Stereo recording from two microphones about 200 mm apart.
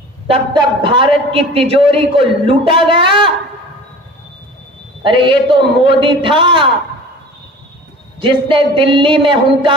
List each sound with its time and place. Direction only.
0.3 s a man's voice: 20° right (ahead or behind)
5.0 s a man's voice: 25° right (ahead or behind)
8.2 s a man's voice: 25° right (ahead or behind)